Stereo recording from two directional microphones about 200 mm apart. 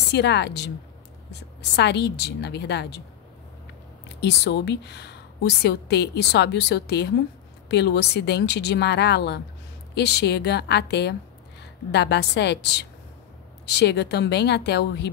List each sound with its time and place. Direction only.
0.1 s a woman's voice: 60° left (ahead or behind)
4.2 s a woman's voice: 60° left (ahead or behind)